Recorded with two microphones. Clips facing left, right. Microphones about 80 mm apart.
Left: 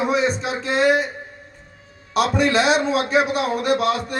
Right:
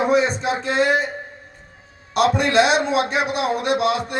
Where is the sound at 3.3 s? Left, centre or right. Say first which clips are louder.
Left 1 dB; right.